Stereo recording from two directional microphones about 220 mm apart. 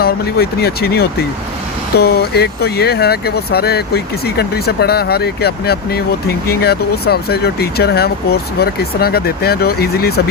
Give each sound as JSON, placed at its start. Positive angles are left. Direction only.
{"t": 0.0, "sound": "speech", "side_deg": 45}